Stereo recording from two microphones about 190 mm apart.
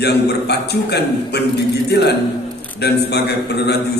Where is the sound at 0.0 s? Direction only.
60° left (ahead or behind).